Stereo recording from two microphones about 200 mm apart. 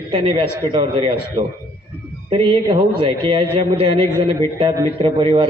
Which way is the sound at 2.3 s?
25° right (ahead or behind).